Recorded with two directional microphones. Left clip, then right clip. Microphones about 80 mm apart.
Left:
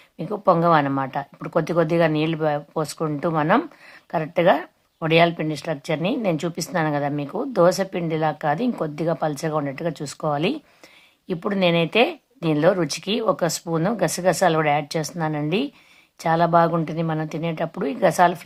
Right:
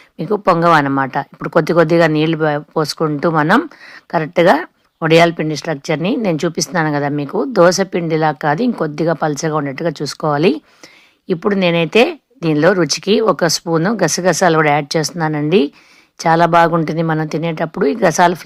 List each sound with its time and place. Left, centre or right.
0.2 s a woman's voice: right
10.2 s speech: right
11.3 s a woman's voice: right